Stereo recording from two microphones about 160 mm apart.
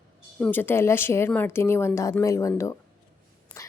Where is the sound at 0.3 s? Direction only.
10° left (ahead or behind).